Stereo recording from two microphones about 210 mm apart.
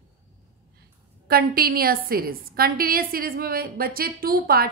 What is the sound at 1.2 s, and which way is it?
A woman's voice, 45° right (ahead or behind).